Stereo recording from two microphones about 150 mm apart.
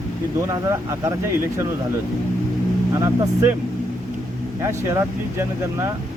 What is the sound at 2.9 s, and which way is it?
Speech, 20° right (ahead or behind).